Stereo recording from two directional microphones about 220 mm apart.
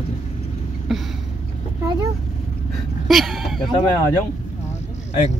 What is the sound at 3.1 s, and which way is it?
Speech, centre (ahead or behind).